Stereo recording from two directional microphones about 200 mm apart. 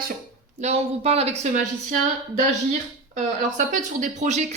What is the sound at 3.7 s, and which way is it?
Speech, 40° right (ahead or behind).